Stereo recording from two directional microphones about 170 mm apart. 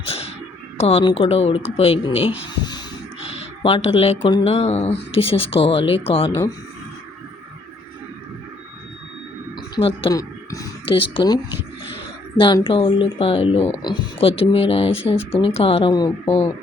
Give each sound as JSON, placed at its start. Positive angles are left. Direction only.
{"t": 0.0, "sound": "a sound", "side_deg": 35}
{"t": 0.8, "sound": "speech", "side_deg": 35}
{"t": 2.6, "sound": "wheeze", "side_deg": 25}
{"t": 3.6, "sound": "speech", "side_deg": 35}
{"t": 4.5, "sound": "speech", "side_deg": 40}
{"t": 9.6, "sound": "a sound", "side_deg": 30}
{"t": 10.8, "sound": "speech", "side_deg": 30}
{"t": 12.4, "sound": "speech", "side_deg": 30}